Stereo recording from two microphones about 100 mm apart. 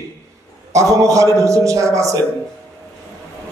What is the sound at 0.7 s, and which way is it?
Speech, 35° right (ahead or behind).